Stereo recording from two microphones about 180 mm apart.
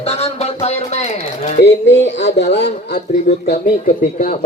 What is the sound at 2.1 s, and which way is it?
Speech, 70° left (ahead or behind).